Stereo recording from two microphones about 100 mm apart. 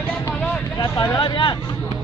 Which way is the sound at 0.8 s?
35° left (ahead or behind).